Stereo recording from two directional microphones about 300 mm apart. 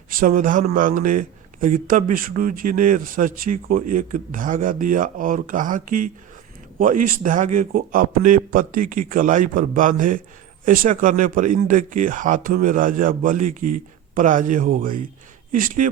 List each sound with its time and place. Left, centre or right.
0.2 s a man's voice: right